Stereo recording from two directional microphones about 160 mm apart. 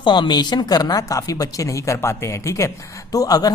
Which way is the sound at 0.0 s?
30° left (ahead or behind).